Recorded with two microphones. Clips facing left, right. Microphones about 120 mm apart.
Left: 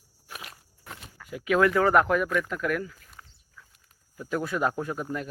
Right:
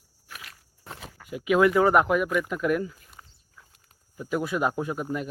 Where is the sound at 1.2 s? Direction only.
15° right (ahead or behind).